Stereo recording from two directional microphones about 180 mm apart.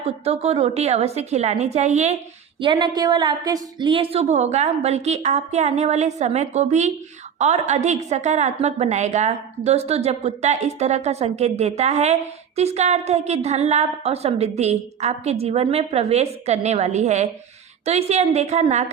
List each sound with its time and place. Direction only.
0.3 s a woman's voice: 35° right (ahead or behind)
2.6 s a woman's voice: 25° right (ahead or behind)